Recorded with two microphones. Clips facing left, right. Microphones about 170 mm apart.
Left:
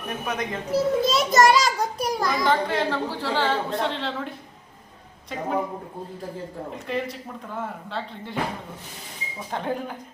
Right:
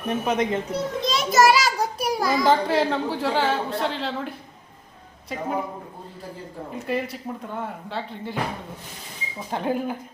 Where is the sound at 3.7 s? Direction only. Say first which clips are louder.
Even; centre (ahead or behind).